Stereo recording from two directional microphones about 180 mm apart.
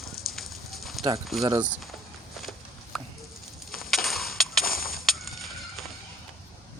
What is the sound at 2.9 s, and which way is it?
Patter, centre (ahead or behind).